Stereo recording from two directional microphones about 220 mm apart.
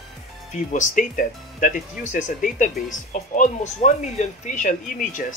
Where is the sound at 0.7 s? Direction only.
35° left (ahead or behind).